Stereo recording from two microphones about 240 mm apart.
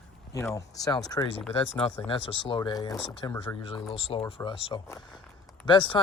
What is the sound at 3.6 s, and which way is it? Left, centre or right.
Speech, left.